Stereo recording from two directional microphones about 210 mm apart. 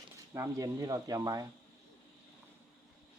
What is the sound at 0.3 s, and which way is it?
Speech, 15° right (ahead or behind).